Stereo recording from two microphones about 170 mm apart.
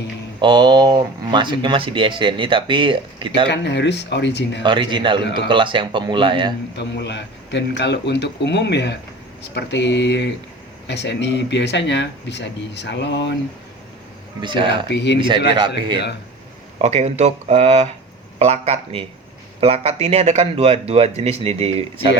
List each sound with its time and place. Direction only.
0.4 s speech: 25° right (ahead or behind)
3.5 s speech: 90° left
4.6 s speech: 30° right (ahead or behind)
6.7 s speech: 80° left
14.4 s speech: 30° right (ahead or behind)
14.8 s speech: 90° left
16.7 s speech: 40° right (ahead or behind)